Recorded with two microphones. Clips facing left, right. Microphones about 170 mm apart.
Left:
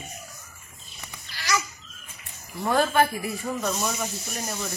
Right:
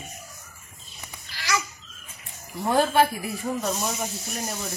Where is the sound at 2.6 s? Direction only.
30° right (ahead or behind).